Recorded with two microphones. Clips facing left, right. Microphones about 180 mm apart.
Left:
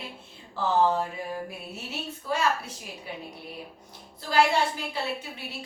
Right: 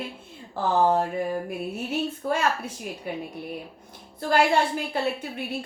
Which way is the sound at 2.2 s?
55° right (ahead or behind).